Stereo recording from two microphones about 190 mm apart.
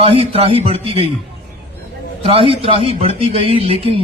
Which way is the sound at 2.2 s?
30° right (ahead or behind).